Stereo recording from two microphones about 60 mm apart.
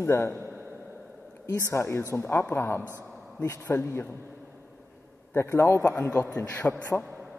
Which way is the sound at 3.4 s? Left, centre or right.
Left.